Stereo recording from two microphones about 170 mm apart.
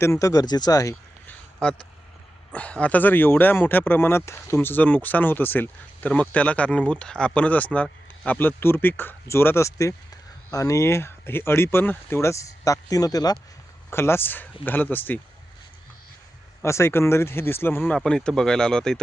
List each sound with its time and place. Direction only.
0.0 s speech: 15° left (ahead or behind)
1.6 s speech: 5° left (ahead or behind)
16.6 s speech: 15° left (ahead or behind)